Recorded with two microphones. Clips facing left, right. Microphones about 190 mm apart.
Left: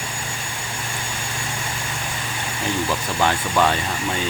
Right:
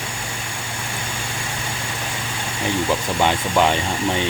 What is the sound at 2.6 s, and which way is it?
Speech, 15° right (ahead or behind).